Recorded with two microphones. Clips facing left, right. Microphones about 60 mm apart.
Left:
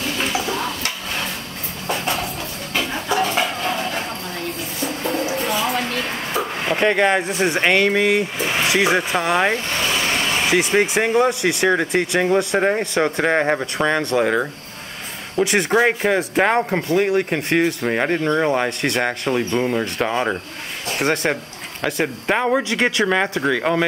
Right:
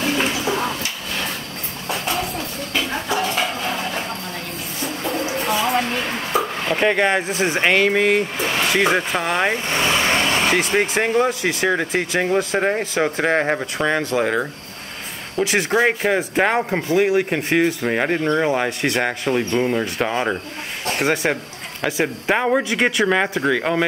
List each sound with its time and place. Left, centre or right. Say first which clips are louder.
0.0 s toilet flush: right 2 dB; right
3.3 s a sound: left 1 dB; centre
6.7 s speech: left 1 dB; centre
9.7 s vehicle: right 2 dB; right
10.5 s speech: left 1 dB; centre